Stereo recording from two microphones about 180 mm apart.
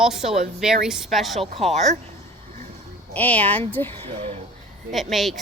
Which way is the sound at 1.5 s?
35° right (ahead or behind).